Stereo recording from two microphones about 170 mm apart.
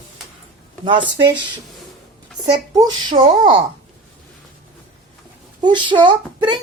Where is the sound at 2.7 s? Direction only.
25° right (ahead or behind).